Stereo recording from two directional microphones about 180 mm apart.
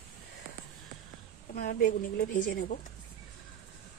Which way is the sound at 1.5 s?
55° left (ahead or behind).